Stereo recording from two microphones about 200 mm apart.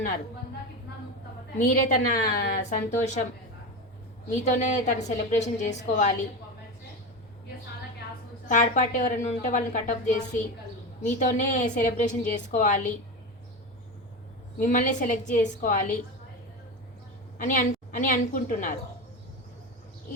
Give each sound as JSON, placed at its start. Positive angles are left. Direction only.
{"t": 1.5, "sound": "a woman's voice", "side_deg": 40}
{"t": 4.4, "sound": "a woman's voice", "side_deg": 40}
{"t": 8.4, "sound": "a woman's voice", "side_deg": 40}
{"t": 14.6, "sound": "a woman's voice", "side_deg": 40}
{"t": 17.3, "sound": "a woman's voice", "side_deg": 40}